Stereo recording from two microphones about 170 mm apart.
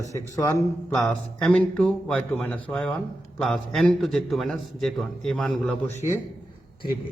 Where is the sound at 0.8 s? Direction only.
5° left (ahead or behind).